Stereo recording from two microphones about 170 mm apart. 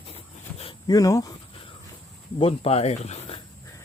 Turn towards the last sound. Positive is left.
turn(degrees=40)  # may be behind; listen again after turning